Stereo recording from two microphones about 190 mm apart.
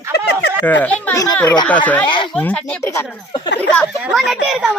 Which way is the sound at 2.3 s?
5° left (ahead or behind).